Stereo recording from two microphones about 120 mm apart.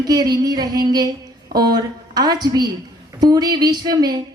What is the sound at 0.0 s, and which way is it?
Speech, 35° right (ahead or behind).